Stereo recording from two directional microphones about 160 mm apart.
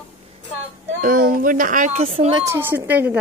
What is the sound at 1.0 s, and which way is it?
Speech, 60° right (ahead or behind).